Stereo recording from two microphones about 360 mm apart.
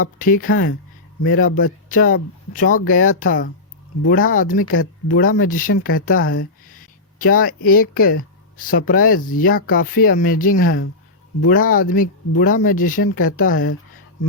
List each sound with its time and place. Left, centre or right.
0.0 s speech: left